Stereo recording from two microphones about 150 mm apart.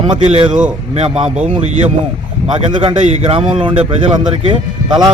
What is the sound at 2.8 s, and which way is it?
A man's voice, 40° right (ahead or behind).